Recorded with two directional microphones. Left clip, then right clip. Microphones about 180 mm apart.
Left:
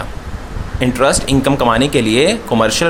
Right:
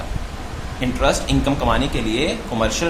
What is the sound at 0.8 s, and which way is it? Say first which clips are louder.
Speech: left 6 dB; 50° left (ahead or behind).